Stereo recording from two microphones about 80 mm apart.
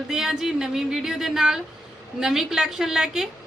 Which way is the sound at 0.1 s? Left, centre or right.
Centre.